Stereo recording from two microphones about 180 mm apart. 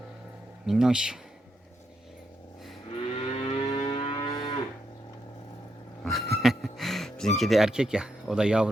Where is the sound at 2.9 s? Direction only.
30° left (ahead or behind).